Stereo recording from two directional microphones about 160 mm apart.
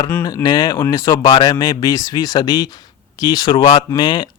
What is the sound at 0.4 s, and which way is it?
Speech, 25° left (ahead or behind).